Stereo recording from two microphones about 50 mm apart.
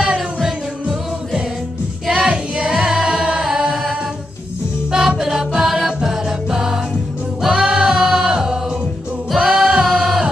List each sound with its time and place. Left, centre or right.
0.0 s music: centre
2.1 s a capella: centre
4.9 s music: centre